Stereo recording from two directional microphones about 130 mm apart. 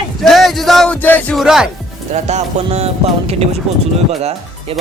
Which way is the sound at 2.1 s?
60° right (ahead or behind).